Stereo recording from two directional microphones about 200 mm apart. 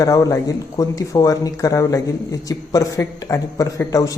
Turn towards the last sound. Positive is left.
turn(degrees=15)  # may be behind; listen again after turning